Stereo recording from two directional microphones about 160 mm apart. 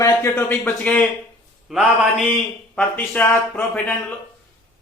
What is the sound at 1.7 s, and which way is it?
Mantra, centre (ahead or behind).